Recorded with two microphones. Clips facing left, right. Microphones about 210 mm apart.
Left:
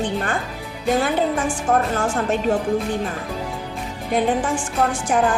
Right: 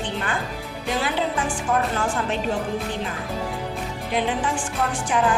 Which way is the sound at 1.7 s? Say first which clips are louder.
Left 4 dB; 45° left (ahead or behind).